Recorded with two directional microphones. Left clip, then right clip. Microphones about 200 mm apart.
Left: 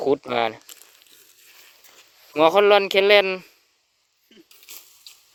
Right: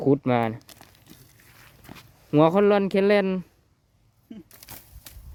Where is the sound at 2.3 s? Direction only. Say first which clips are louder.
Left 3 dB; centre (ahead or behind).